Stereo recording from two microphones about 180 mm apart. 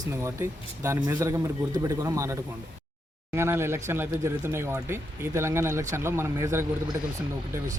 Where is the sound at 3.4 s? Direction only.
15° right (ahead or behind).